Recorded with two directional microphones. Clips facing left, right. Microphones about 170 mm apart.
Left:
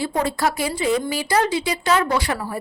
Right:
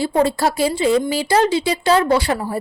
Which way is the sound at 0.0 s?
30° right (ahead or behind).